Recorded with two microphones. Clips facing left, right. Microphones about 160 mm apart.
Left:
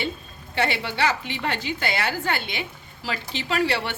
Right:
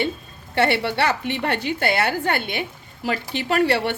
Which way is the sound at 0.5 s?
60° right (ahead or behind).